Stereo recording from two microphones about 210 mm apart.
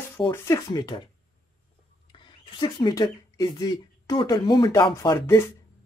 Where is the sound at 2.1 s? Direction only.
20° left (ahead or behind).